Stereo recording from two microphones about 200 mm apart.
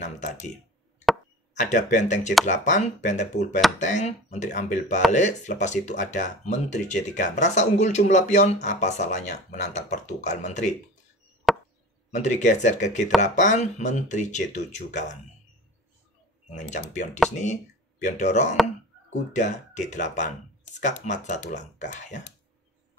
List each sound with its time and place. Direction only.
0.0 s speech: 35° left (ahead or behind)
1.5 s speech: 35° left (ahead or behind)
11.5 s chop: centre (ahead or behind)
12.1 s speech: 35° left (ahead or behind)
16.5 s speech: 35° left (ahead or behind)